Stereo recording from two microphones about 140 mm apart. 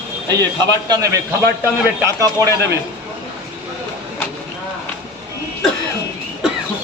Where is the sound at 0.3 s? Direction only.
25° right (ahead or behind).